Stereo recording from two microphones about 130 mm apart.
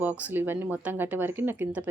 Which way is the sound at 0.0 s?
15° right (ahead or behind).